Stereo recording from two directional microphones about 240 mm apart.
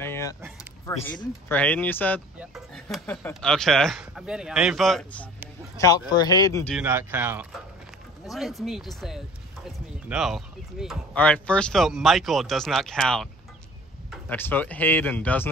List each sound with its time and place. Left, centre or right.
0.0 s a sound: centre
1.0 s speech: centre
1.5 s speech: centre
5.8 s speech: centre
6.7 s speech: centre